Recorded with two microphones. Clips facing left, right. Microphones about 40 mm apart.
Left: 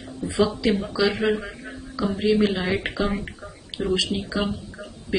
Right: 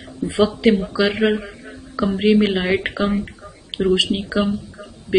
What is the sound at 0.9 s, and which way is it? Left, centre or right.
Speech, right.